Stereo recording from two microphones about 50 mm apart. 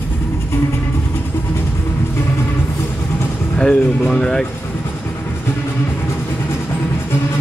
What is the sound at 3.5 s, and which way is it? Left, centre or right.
Speech, left.